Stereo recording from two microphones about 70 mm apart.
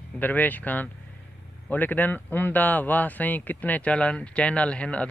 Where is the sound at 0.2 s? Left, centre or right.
Left.